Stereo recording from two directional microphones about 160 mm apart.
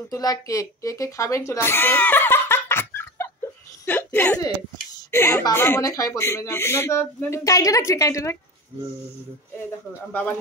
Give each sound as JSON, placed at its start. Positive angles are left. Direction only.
{"t": 0.1, "sound": "speech", "side_deg": 20}